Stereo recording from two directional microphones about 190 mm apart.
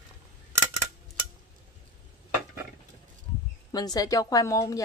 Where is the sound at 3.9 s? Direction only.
20° left (ahead or behind).